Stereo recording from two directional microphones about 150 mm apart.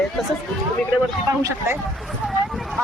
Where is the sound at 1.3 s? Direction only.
20° right (ahead or behind).